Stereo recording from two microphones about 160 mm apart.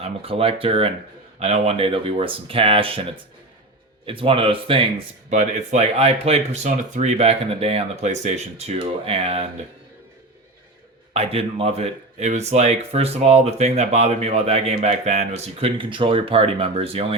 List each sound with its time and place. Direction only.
0.0 s speech: 35° right (ahead or behind)
5.3 s speech: 45° right (ahead or behind)
11.1 s speech: 40° right (ahead or behind)